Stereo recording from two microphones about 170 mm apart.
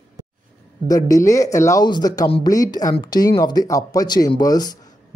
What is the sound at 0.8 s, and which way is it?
A man's voice, 20° left (ahead or behind).